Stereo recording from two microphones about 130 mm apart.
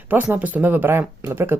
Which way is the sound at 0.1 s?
10° right (ahead or behind).